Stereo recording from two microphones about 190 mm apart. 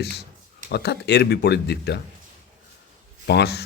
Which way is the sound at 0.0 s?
60° left (ahead or behind).